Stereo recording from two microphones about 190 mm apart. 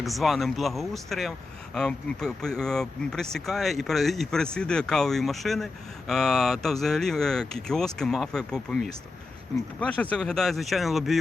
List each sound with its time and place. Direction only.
0.0 s speech: centre (ahead or behind)